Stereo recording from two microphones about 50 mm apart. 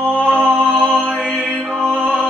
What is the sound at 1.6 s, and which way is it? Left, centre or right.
Music, centre.